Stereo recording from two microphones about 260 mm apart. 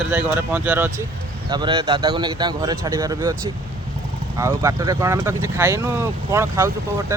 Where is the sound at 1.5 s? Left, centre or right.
Centre.